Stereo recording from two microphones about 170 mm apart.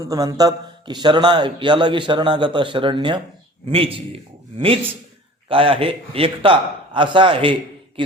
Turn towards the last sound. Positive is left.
turn(degrees=-30)  # may be behind; listen again after turning